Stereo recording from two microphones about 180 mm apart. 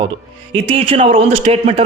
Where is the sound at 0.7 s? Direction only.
35° right (ahead or behind).